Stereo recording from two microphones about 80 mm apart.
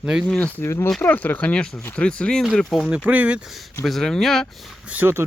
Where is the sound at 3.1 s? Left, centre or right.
Centre.